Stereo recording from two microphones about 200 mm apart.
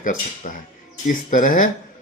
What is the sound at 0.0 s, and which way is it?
Speech, 40° left (ahead or behind).